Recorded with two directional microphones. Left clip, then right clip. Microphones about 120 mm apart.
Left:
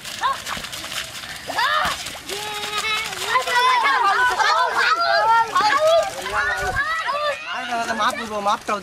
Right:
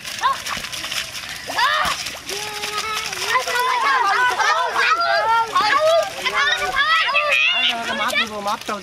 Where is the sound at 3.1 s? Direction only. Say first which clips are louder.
Even; 5° left (ahead or behind).